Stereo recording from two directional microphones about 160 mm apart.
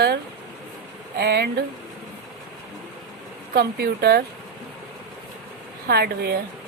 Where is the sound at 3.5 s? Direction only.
75° right (ahead or behind).